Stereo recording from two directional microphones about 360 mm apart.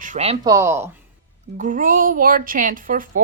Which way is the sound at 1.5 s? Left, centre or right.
Right.